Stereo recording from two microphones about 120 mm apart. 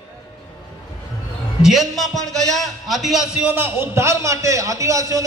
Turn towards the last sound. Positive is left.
turn(degrees=-25)  # may be behind; listen again after turning